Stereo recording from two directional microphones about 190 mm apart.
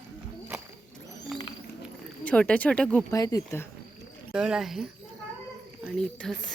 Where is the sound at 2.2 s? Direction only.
5° left (ahead or behind).